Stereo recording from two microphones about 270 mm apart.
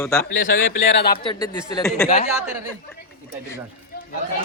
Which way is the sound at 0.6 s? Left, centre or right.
Left.